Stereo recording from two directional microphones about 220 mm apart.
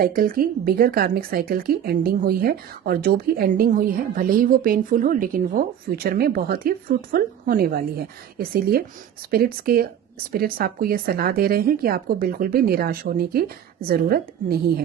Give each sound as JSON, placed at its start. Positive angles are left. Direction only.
{"t": 0.0, "sound": "speech", "side_deg": -40}